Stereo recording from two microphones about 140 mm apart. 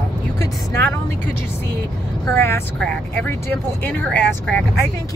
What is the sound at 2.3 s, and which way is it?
Speech, 15° left (ahead or behind).